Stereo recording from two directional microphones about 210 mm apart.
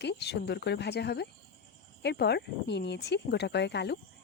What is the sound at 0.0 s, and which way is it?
Speech, 55° left (ahead or behind).